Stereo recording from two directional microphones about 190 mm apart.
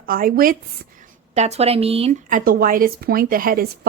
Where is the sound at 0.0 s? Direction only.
50° right (ahead or behind).